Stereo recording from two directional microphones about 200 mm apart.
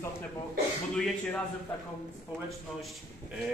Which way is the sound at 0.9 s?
5° left (ahead or behind).